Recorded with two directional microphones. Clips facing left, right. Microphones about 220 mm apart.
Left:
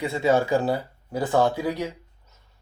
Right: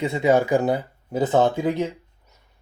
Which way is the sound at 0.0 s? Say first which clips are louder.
Right 2 dB; 20° right (ahead or behind).